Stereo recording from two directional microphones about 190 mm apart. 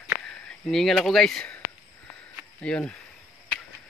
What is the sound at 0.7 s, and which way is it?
Speech, centre (ahead or behind).